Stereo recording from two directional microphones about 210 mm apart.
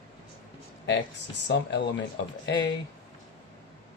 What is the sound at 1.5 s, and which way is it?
Speech, 55° left (ahead or behind).